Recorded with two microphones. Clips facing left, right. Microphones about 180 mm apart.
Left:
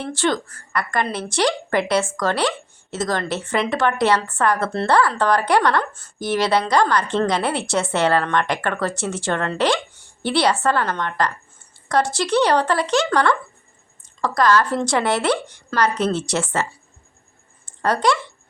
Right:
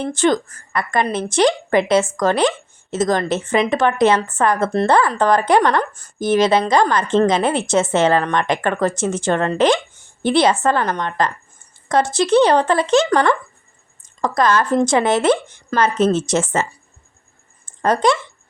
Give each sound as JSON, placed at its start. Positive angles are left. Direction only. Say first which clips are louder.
{"t": 0.0, "sound": "speech", "louder": "right 5 dB", "side_deg": -20}
{"t": 17.8, "sound": "speech", "louder": "right 3 dB", "side_deg": -20}